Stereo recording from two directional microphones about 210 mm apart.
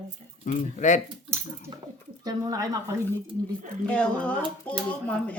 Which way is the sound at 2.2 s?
15° right (ahead or behind).